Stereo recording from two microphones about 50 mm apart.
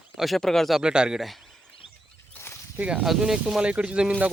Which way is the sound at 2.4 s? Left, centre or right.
Left.